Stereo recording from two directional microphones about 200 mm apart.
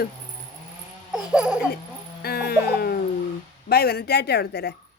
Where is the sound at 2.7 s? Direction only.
50° left (ahead or behind).